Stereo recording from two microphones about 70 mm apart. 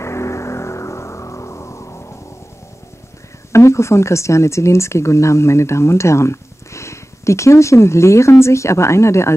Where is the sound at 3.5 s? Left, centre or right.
Left.